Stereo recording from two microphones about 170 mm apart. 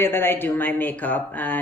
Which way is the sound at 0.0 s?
15° left (ahead or behind).